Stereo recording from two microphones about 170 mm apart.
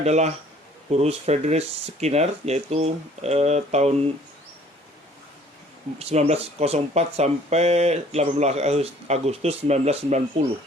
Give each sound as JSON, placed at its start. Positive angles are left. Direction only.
{"t": 0.0, "sound": "speech", "side_deg": -40}
{"t": 6.0, "sound": "speech", "side_deg": -35}